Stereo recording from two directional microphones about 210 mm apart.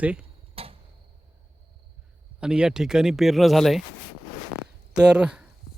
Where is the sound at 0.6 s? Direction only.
25° right (ahead or behind).